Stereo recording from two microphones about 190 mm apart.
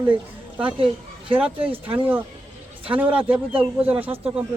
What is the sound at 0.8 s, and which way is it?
Speech, 30° right (ahead or behind).